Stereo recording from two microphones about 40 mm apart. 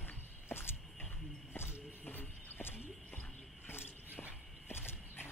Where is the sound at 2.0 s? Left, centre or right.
Left.